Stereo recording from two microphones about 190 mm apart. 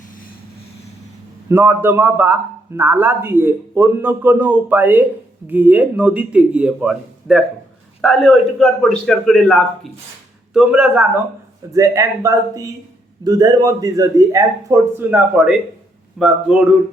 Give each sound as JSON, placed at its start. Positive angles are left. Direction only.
{"t": 1.5, "sound": "a man's voice", "side_deg": -10}